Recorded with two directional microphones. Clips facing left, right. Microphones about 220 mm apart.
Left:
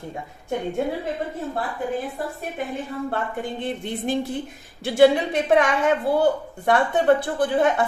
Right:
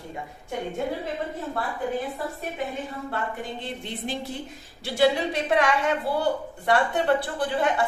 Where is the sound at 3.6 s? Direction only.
50° left (ahead or behind).